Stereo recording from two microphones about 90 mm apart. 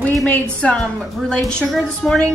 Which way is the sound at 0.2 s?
15° left (ahead or behind).